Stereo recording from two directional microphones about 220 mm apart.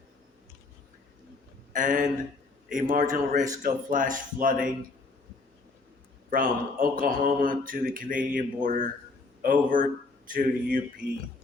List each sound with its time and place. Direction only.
1.7 s speech: 35° right (ahead or behind)
6.3 s speech: 40° right (ahead or behind)